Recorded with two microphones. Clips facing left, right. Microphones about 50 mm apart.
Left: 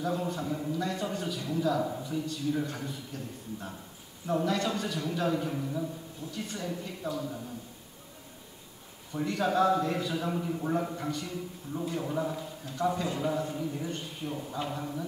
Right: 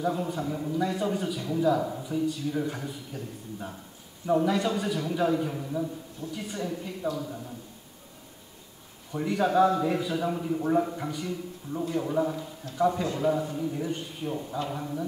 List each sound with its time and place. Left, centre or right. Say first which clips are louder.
0.0 s a man's voice: right 3 dB; centre
9.1 s a man's voice: right 4 dB; centre